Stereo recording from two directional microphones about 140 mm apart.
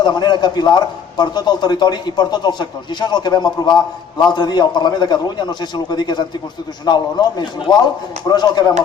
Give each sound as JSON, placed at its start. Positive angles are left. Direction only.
{"t": 0.0, "sound": "a man's voice", "side_deg": 30}